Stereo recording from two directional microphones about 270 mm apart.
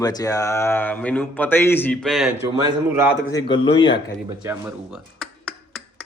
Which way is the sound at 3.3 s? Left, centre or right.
Centre.